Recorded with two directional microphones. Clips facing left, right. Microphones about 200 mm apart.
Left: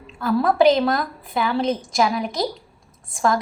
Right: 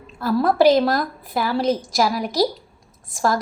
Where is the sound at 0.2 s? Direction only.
5° right (ahead or behind).